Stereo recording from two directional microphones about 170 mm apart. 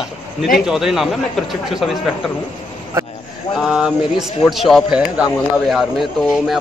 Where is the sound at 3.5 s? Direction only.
5° right (ahead or behind).